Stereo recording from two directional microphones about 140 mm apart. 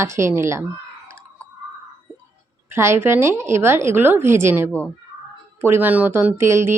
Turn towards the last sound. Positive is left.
turn(degrees=-20)  # may be behind; listen again after turning